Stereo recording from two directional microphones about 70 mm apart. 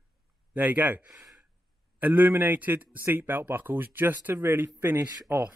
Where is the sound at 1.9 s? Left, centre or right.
Right.